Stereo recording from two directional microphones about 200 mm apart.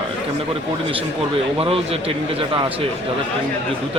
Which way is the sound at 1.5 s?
30° right (ahead or behind).